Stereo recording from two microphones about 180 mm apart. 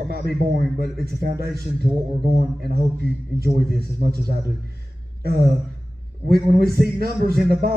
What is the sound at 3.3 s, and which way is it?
A man's voice, 60° right (ahead or behind).